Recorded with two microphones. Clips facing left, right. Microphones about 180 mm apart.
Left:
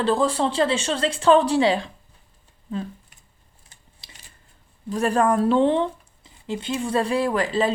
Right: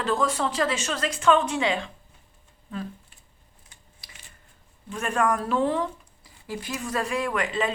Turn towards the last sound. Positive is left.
turn(degrees=35)  # may be behind; listen again after turning